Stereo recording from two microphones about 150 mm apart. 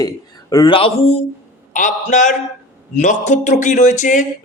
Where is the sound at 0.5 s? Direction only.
35° left (ahead or behind).